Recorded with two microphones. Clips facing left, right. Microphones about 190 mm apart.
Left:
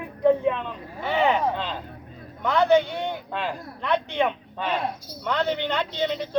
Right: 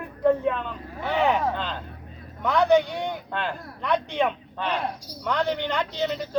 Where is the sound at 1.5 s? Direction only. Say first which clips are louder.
Left 1 dB; centre (ahead or behind).